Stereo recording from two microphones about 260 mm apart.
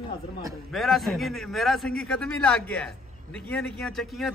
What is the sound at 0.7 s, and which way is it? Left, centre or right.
A man's voice, centre.